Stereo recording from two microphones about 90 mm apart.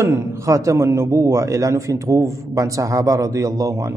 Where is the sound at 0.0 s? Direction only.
35° right (ahead or behind).